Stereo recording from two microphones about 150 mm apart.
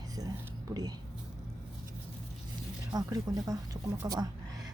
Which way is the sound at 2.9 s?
30° right (ahead or behind).